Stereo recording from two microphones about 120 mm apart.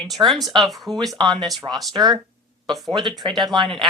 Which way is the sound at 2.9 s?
40° right (ahead or behind).